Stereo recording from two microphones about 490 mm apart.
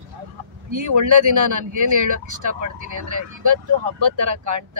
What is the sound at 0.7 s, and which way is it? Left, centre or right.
Speech, right.